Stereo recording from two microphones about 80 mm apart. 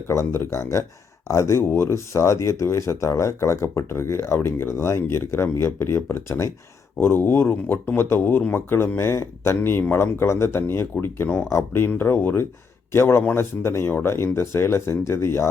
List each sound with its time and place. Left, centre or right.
0.1 s speech: left